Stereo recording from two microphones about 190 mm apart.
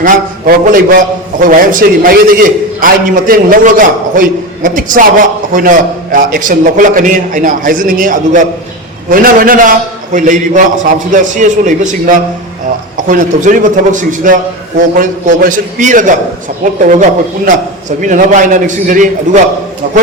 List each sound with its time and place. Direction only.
0.0 s a man's voice: 45° right (ahead or behind)